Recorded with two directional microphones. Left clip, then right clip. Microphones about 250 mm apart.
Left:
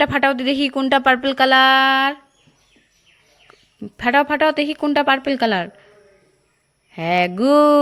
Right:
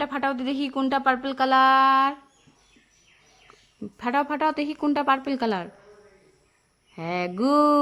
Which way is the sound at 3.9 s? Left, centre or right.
Centre.